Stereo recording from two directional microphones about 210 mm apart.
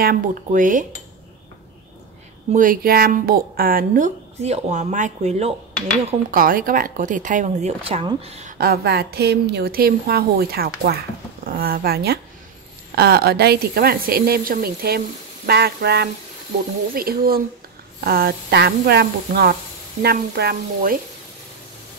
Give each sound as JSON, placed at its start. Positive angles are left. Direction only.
{"t": 0.0, "sound": "a woman's voice", "side_deg": -40}
{"t": 2.5, "sound": "a woman's voice", "side_deg": -40}
{"t": 8.5, "sound": "a woman's voice", "side_deg": -50}